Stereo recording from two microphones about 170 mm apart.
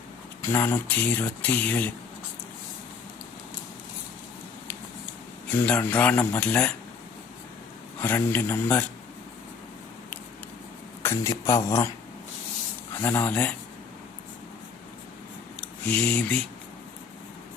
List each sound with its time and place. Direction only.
0.4 s speech: 15° left (ahead or behind)
5.5 s speech: 10° left (ahead or behind)
8.0 s speech: 10° left (ahead or behind)
11.0 s speech: 15° left (ahead or behind)
12.9 s speech: 15° left (ahead or behind)
15.6 s speech: 10° left (ahead or behind)